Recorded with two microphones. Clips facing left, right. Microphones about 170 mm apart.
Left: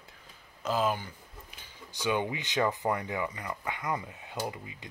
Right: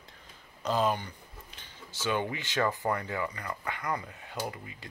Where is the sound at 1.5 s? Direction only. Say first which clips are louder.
Left 1 dB; 15° left (ahead or behind).